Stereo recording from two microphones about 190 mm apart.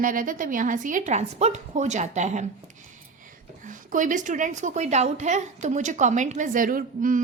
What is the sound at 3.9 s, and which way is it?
A woman's voice, 40° right (ahead or behind).